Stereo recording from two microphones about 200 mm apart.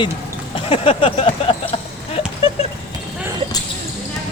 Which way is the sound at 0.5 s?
25° left (ahead or behind).